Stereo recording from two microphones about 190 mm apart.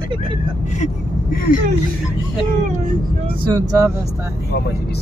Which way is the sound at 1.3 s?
50° left (ahead or behind).